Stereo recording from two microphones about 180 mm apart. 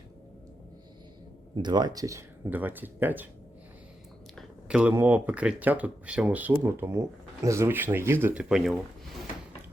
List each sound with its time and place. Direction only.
1.5 s speech: 25° right (ahead or behind)
4.4 s speech: 5° right (ahead or behind)